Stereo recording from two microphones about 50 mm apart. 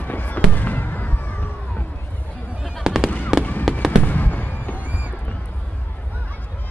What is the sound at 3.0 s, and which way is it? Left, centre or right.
Fireworks, left.